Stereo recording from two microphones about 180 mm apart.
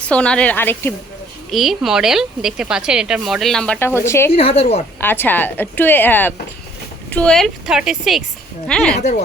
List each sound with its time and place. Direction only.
0.0 s a woman's voice: 5° left (ahead or behind)
1.5 s speech: centre (ahead or behind)
4.3 s a woman's voice: 30° left (ahead or behind)
4.9 s a woman's voice: 10° left (ahead or behind)
9.0 s a woman's voice: 40° left (ahead or behind)